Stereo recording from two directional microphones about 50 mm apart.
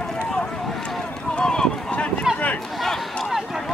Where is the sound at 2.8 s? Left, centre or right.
Centre.